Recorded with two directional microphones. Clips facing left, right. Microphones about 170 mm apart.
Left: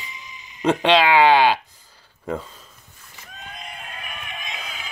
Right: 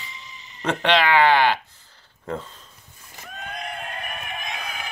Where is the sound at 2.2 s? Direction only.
10° left (ahead or behind).